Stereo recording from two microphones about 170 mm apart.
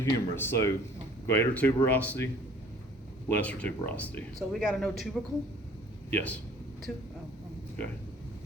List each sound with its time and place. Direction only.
0.0 s speech: 15° left (ahead or behind)